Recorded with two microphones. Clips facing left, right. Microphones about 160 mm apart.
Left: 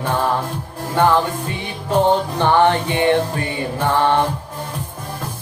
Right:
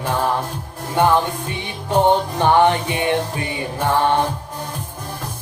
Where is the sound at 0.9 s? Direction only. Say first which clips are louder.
Left 1 dB; 20° right (ahead or behind).